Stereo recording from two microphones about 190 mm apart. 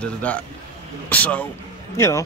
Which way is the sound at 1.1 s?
10° left (ahead or behind).